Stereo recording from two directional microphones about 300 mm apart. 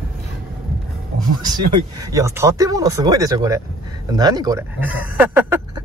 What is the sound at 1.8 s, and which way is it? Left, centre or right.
Speech, centre.